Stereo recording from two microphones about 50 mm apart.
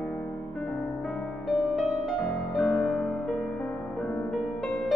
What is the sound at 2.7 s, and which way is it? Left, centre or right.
Music, left.